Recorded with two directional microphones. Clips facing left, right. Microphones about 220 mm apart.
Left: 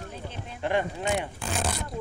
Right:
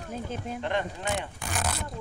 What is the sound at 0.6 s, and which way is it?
Speech, 10° left (ahead or behind).